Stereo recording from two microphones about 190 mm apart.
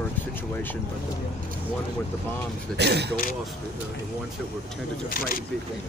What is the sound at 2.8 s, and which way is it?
Speech, 60° right (ahead or behind).